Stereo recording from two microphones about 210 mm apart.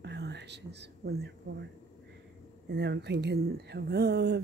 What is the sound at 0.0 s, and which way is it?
Whispering, 55° right (ahead or behind).